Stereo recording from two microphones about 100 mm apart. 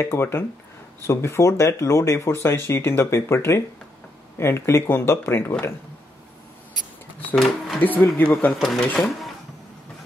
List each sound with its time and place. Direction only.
0.0 s speech: 25° left (ahead or behind)
7.3 s speech: centre (ahead or behind)
7.8 s speech: 20° left (ahead or behind)
8.5 s speech: 5° left (ahead or behind)